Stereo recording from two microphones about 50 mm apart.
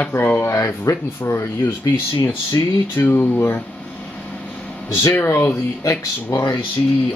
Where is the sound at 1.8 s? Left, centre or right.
Left.